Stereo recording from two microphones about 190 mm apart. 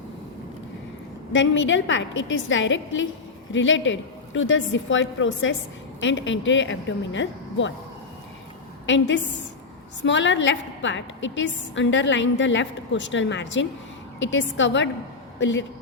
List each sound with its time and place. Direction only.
1.3 s a woman's voice: 80° left
8.9 s a woman's voice: 70° left (ahead or behind)